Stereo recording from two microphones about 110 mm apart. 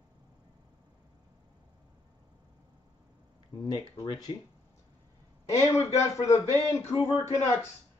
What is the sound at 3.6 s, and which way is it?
Speech, 40° left (ahead or behind).